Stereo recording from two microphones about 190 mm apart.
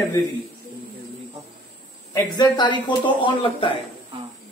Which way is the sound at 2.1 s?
20° left (ahead or behind).